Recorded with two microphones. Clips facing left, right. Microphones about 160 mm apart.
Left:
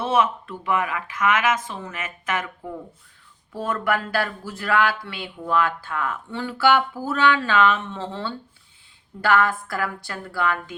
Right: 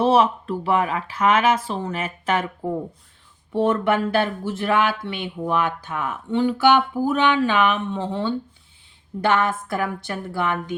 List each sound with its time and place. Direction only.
0.0 s speech: 35° right (ahead or behind)